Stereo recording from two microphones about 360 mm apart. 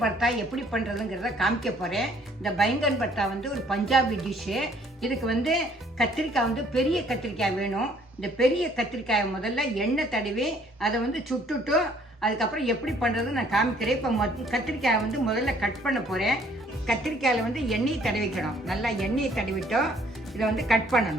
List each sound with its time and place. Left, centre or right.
0.0 s a woman's voice: centre